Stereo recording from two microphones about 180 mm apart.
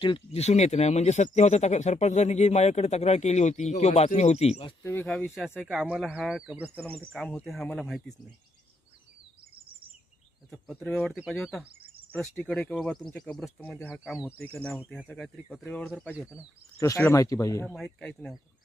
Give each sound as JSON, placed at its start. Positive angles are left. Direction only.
{"t": 0.0, "sound": "speech", "side_deg": 35}
{"t": 4.8, "sound": "speech", "side_deg": 10}
{"t": 10.5, "sound": "speech", "side_deg": 5}
{"t": 14.0, "sound": "speech", "side_deg": -5}
{"t": 14.3, "sound": "speech", "side_deg": 5}
{"t": 14.8, "sound": "speech", "side_deg": -5}
{"t": 15.6, "sound": "speech", "side_deg": 10}